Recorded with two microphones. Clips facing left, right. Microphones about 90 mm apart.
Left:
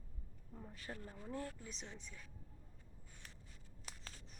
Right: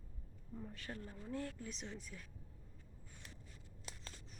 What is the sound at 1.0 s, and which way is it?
Speech, 25° left (ahead or behind).